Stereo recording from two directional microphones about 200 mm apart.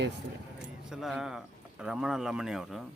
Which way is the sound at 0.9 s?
Centre (ahead or behind).